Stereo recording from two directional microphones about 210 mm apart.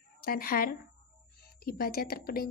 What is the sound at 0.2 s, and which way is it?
Speech, 45° left (ahead or behind).